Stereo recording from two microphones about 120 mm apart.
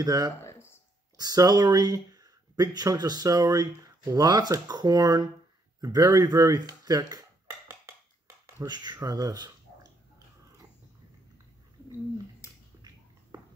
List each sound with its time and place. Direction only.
0.0 s speech: 30° right (ahead or behind)
0.4 s a sound: 20° left (ahead or behind)
1.1 s speech: 30° right (ahead or behind)